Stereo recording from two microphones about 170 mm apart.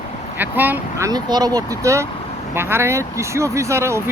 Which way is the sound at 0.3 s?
10° right (ahead or behind).